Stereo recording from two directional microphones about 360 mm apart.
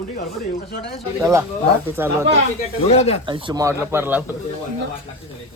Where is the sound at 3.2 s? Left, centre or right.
Centre.